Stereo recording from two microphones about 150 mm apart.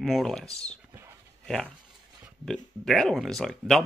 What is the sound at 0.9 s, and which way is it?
Dog, 15° right (ahead or behind).